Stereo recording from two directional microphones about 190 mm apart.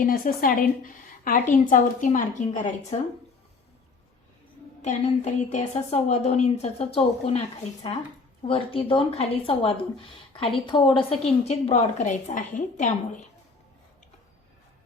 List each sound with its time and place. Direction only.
0.0 s a woman's voice: 50° left (ahead or behind)
4.8 s a woman's voice: 40° left (ahead or behind)
8.4 s a woman's voice: 30° left (ahead or behind)